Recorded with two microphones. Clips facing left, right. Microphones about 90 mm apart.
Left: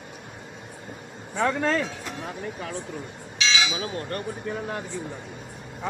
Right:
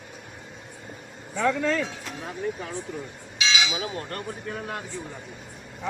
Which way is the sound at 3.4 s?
15° right (ahead or behind).